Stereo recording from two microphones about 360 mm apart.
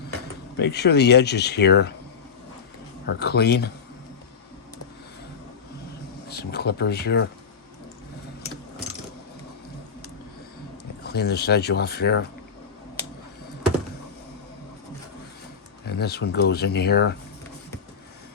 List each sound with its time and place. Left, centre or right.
0.5 s speech: left
3.1 s speech: left
6.2 s speech: left
11.0 s speech: left
15.9 s speech: left